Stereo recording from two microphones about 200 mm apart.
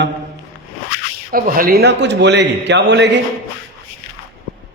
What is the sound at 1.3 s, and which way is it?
Mantra, 45° right (ahead or behind).